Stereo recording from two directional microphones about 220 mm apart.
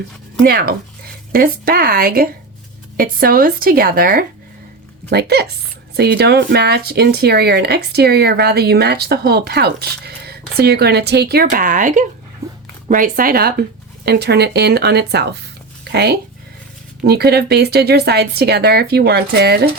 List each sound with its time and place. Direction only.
0.4 s speech: 45° right (ahead or behind)
12.4 s dog: 15° right (ahead or behind)
12.9 s speech: 40° right (ahead or behind)
15.8 s a sound: 50° right (ahead or behind)
17.0 s speech: 45° right (ahead or behind)